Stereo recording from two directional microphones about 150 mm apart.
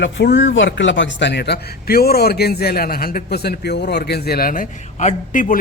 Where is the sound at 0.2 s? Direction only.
90° left.